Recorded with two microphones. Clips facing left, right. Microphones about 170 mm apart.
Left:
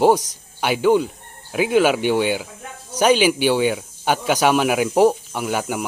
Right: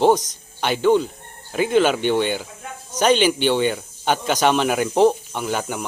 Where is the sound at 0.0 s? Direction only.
10° left (ahead or behind).